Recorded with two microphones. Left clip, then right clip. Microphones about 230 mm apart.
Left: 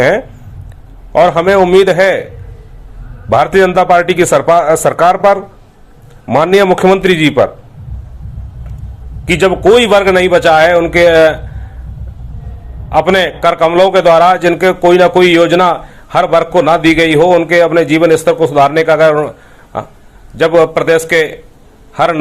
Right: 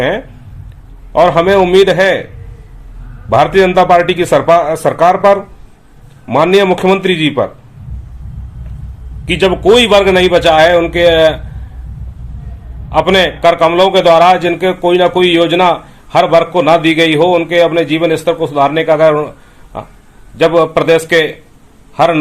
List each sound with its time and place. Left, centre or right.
1.1 s a man's voice: centre
3.2 s a man's voice: centre
9.2 s a man's voice: centre
12.9 s a man's voice: centre